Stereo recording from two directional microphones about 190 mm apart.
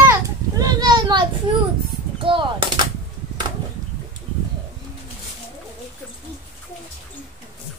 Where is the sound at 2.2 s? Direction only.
25° right (ahead or behind).